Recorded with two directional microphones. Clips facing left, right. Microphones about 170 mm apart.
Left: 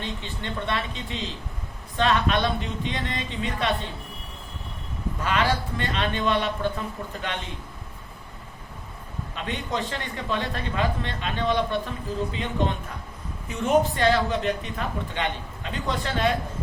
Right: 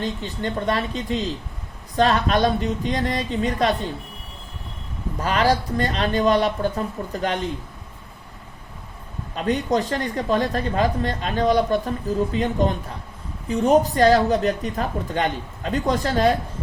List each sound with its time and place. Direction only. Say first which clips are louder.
0.0 s speech: right 7 dB; 40° right (ahead or behind)
5.2 s speech: right 5 dB; 40° right (ahead or behind)
9.3 s speech: right 9 dB; 40° right (ahead or behind)
13.5 s speech: right 4 dB; 35° right (ahead or behind)